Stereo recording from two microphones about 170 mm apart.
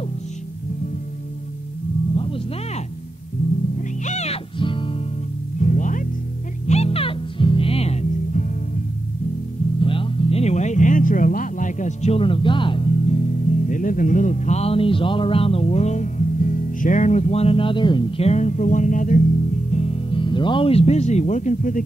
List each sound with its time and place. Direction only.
2.1 s music: 35° left (ahead or behind)
3.7 s music: 45° left (ahead or behind)
5.6 s music: 50° left (ahead or behind)
6.7 s music: 35° left (ahead or behind)
9.8 s music: 30° left (ahead or behind); by 19.2 s 50° left (ahead or behind)
19.7 s speech: 40° left (ahead or behind)